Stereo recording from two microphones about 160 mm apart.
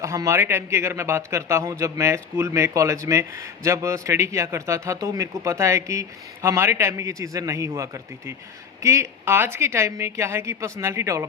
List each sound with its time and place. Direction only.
0.0 s a woman's voice: 20° right (ahead or behind)